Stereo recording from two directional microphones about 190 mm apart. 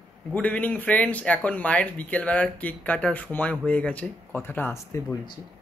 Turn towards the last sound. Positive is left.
turn(degrees=15)  # may be behind; listen again after turning